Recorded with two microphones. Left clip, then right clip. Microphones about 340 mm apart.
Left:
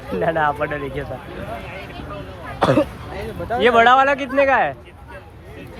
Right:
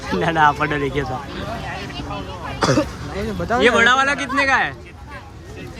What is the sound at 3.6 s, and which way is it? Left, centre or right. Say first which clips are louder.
Speech: left 2 dB; centre.